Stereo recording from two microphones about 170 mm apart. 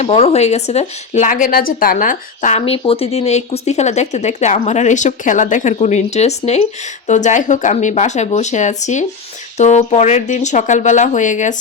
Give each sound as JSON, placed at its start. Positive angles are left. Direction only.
{"t": 0.0, "sound": "a woman's voice", "side_deg": 40}
{"t": 2.6, "sound": "a woman's voice", "side_deg": 35}